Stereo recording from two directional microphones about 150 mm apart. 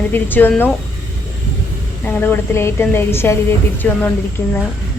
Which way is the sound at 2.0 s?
10° left (ahead or behind).